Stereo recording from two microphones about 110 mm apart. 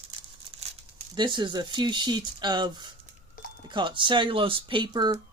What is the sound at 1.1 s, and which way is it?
Speech, 45° right (ahead or behind).